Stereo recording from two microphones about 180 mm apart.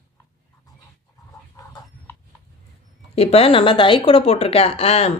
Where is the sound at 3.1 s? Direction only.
35° left (ahead or behind).